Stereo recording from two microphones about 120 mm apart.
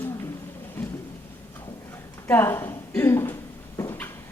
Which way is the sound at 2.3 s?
20° left (ahead or behind).